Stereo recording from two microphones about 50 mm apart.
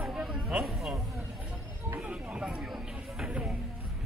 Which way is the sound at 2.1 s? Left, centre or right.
Right.